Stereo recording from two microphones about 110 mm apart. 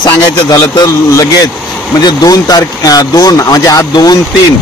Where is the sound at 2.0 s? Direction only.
40° left (ahead or behind).